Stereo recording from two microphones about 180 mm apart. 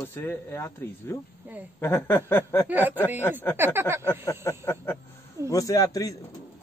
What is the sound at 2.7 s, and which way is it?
Speech, 10° right (ahead or behind).